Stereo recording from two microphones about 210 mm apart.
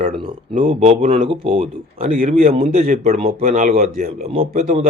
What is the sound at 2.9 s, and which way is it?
Speech, 30° right (ahead or behind).